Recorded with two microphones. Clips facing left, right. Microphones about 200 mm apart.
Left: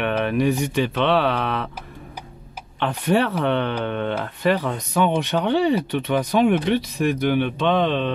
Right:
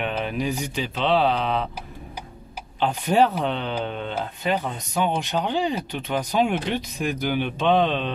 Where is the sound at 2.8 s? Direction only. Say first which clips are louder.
Even; 65° left (ahead or behind).